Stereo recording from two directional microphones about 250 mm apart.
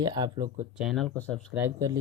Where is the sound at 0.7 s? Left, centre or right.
Centre.